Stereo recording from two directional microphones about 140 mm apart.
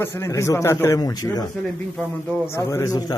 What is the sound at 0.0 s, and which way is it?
A man's voice, 20° left (ahead or behind).